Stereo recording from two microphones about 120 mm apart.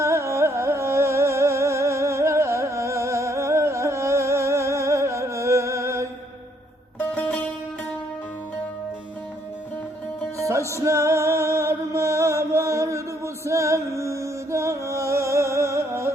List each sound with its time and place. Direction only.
0.0 s music: 25° right (ahead or behind)
7.1 s music: 10° left (ahead or behind)
10.3 s music: 25° right (ahead or behind)